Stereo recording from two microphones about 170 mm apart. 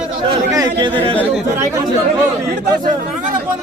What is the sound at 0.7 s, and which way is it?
Speech, 30° right (ahead or behind).